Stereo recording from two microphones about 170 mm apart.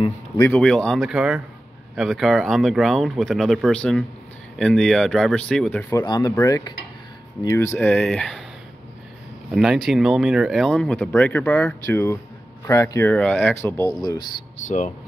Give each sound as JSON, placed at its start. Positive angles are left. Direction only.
{"t": 0.4, "sound": "speech", "side_deg": 10}
{"t": 9.5, "sound": "speech", "side_deg": 0}